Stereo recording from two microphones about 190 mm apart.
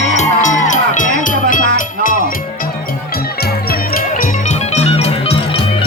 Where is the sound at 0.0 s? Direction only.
40° left (ahead or behind).